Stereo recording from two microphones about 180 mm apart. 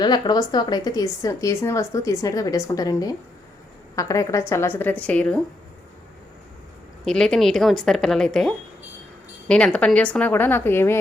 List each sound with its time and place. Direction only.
0.0 s a woman's voice: 25° left (ahead or behind)
7.0 s speech: 5° left (ahead or behind)